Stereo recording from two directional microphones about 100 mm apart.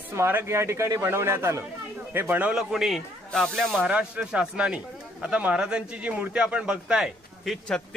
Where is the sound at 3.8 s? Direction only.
10° right (ahead or behind).